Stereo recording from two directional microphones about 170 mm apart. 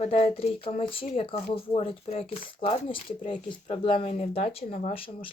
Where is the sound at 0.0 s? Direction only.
40° left (ahead or behind).